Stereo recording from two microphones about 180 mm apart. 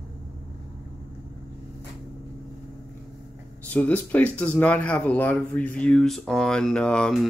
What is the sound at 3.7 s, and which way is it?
Speech, 10° left (ahead or behind).